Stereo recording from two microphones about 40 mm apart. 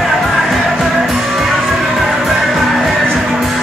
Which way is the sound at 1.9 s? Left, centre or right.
Centre.